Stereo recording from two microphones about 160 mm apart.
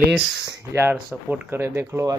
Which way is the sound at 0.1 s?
5° right (ahead or behind).